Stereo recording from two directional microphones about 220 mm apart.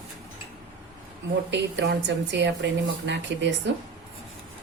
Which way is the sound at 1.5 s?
50° right (ahead or behind).